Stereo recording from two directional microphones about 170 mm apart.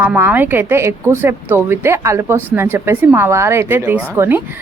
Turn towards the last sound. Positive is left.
turn(degrees=-15)  # may be behind; listen again after turning